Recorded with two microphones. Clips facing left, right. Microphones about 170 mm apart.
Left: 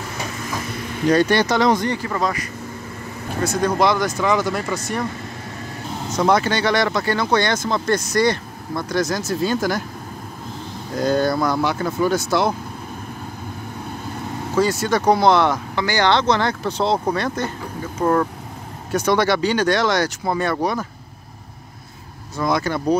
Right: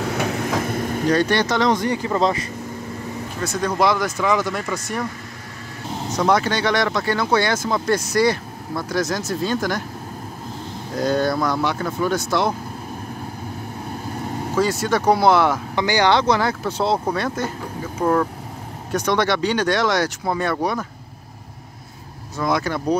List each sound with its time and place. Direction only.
0.0 s vehicle: 75° right (ahead or behind); by 1.0 s 45° right (ahead or behind)
1.1 s speech: 5° left (ahead or behind)
1.9 s speech: 20° right (ahead or behind)
3.4 s speech: centre (ahead or behind)
6.1 s speech: centre (ahead or behind)
11.0 s speech: centre (ahead or behind)
14.5 s speech: centre (ahead or behind)
22.4 s speech: centre (ahead or behind)